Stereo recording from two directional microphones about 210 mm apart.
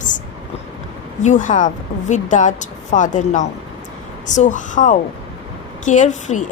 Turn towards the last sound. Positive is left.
turn(degrees=35)  # may be behind; listen again after turning